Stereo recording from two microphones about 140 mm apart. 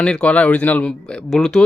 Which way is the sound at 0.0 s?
5° left (ahead or behind).